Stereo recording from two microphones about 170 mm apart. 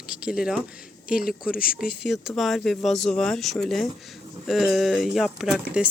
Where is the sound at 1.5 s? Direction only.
60° left (ahead or behind).